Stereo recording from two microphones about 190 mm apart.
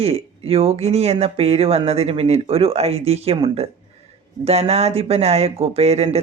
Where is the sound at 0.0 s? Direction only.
30° right (ahead or behind).